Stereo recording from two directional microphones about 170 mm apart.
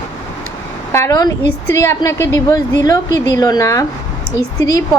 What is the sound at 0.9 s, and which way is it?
A woman's voice, 15° left (ahead or behind).